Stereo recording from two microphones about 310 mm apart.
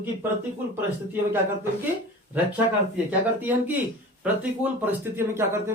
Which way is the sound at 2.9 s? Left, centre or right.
Centre.